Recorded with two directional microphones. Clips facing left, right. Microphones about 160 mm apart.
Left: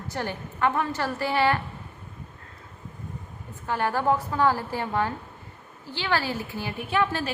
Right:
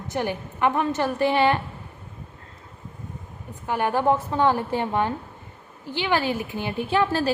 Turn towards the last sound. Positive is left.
turn(degrees=-35)  # may be behind; listen again after turning